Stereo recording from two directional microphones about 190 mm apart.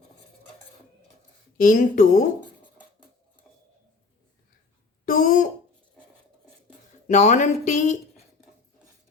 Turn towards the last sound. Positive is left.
turn(degrees=40)  # may be behind; listen again after turning